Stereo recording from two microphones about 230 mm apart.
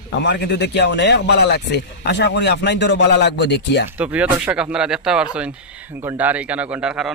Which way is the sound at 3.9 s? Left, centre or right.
Centre.